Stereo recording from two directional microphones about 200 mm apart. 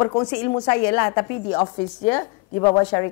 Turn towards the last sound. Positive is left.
turn(degrees=15)  # may be behind; listen again after turning